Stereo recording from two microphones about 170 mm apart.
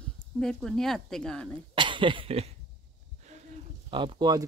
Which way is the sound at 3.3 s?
40° right (ahead or behind).